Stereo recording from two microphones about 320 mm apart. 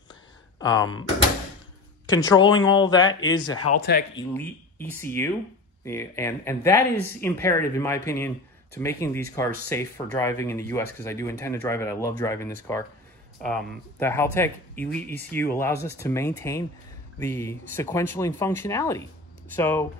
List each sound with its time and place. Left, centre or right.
0.1 s a sound: centre
2.0 s speech: centre
3.5 s speech: left
4.2 s speech: centre